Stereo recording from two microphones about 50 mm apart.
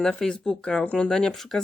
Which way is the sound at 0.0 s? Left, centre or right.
Centre.